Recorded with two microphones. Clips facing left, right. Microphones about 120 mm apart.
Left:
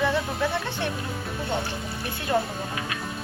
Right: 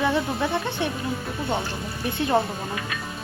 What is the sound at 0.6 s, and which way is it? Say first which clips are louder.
Speech: right 3 dB; 15° right (ahead or behind).